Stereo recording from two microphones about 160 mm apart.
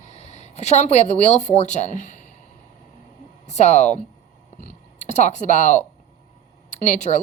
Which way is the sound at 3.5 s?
45° left (ahead or behind).